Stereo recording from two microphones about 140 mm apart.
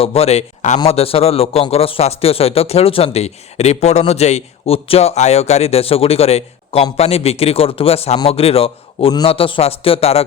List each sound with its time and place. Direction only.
0.0 s speech: 45° left (ahead or behind)
0.9 s speech: 45° left (ahead or behind)